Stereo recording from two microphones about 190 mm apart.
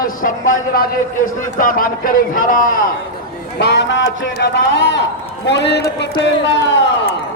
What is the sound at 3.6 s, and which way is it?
A man's voice, 65° left (ahead or behind).